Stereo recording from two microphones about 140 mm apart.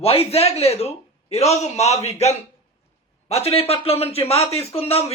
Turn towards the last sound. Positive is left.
turn(degrees=45)  # may be behind; listen again after turning